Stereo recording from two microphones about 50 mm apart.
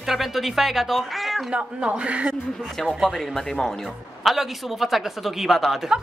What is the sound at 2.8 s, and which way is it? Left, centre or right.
Speech, centre.